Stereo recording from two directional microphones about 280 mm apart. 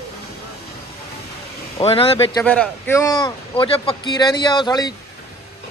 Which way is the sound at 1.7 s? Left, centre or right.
Centre.